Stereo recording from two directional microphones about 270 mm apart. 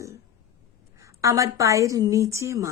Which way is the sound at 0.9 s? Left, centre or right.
Centre.